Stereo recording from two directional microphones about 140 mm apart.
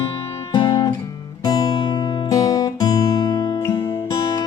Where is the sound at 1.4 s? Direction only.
30° left (ahead or behind).